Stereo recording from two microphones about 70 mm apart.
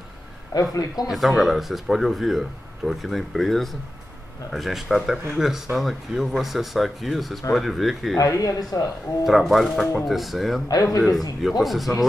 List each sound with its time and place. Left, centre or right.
0.6 s speech: left
1.1 s speech: centre
8.2 s speech: left
9.2 s speech: centre
10.7 s speech: left
11.0 s speech: centre